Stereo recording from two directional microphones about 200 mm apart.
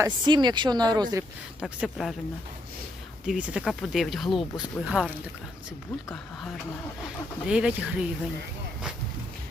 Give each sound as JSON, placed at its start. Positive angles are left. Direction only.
{"t": 0.0, "sound": "speech", "side_deg": -20}
{"t": 1.6, "sound": "speech", "side_deg": 0}
{"t": 3.2, "sound": "speech", "side_deg": -5}
{"t": 7.4, "sound": "speech", "side_deg": -5}